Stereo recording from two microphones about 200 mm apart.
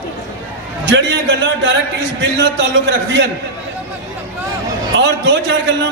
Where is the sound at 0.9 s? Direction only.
60° right (ahead or behind).